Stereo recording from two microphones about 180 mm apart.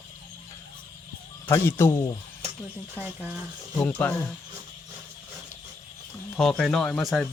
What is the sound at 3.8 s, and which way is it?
Speech, 10° left (ahead or behind).